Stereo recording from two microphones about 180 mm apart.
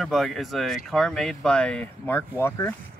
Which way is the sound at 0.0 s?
Centre (ahead or behind).